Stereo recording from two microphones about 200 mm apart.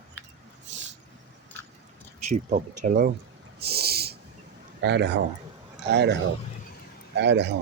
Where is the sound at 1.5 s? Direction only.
10° left (ahead or behind).